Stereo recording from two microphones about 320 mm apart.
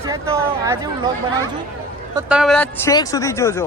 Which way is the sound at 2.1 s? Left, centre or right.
Centre.